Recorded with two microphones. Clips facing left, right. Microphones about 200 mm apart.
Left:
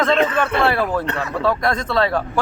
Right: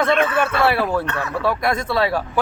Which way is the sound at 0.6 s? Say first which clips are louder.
Right 1 dB; 5° right (ahead or behind).